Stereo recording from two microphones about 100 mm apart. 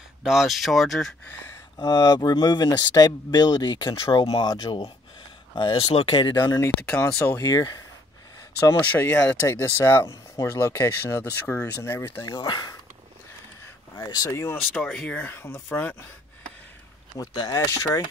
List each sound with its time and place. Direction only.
0.2 s speech: 5° right (ahead or behind)
1.5 s speech: 40° left (ahead or behind)
5.8 s speech: 65° left (ahead or behind); by 6.6 s 45° left (ahead or behind)
6.9 s speech: 25° left (ahead or behind)
8.9 s speech: 15° left (ahead or behind)
9.5 s speech: 30° left (ahead or behind)
12.2 s speech: 45° left (ahead or behind)
13.9 s speech: 40° left (ahead or behind)
14.5 s speech: 10° left (ahead or behind)
17.3 s speech: 50° left (ahead or behind)